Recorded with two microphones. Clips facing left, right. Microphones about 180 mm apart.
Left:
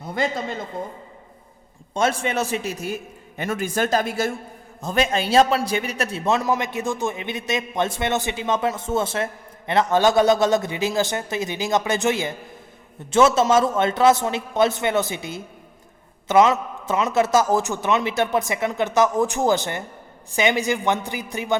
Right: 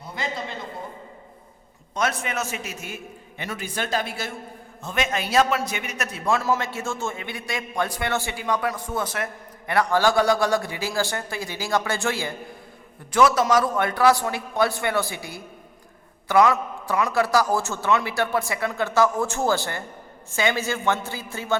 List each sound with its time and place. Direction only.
0.0 s a man's voice: 50° left (ahead or behind)
1.9 s a man's voice: 25° left (ahead or behind)